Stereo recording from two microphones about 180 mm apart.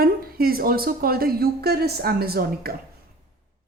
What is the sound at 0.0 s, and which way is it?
A woman's voice, 55° right (ahead or behind).